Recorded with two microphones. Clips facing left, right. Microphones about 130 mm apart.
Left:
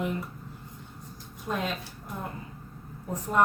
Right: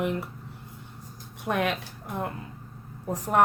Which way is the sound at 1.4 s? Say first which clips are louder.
Right 5 dB; 70° right (ahead or behind).